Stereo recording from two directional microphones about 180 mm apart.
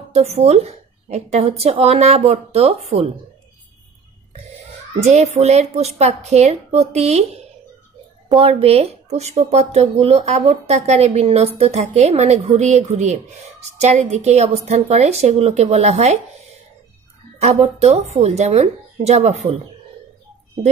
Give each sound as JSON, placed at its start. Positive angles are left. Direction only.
{"t": 0.1, "sound": "speech", "side_deg": -35}
{"t": 5.0, "sound": "speech", "side_deg": -35}
{"t": 17.4, "sound": "speech", "side_deg": -35}